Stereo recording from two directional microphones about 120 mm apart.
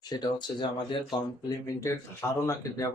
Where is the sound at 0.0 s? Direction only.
35° left (ahead or behind).